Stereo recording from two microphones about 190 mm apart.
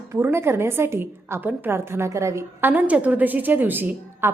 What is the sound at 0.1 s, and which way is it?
A woman's voice, 15° right (ahead or behind).